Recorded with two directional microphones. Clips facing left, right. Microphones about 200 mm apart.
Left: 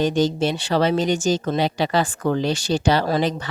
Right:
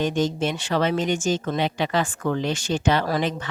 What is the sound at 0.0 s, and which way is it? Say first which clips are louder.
Speech: left 3 dB; 35° left (ahead or behind).